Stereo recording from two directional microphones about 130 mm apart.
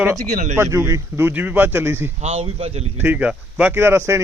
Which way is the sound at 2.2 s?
50° right (ahead or behind).